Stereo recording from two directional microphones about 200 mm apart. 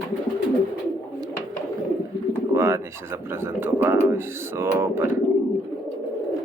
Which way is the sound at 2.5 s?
15° right (ahead or behind).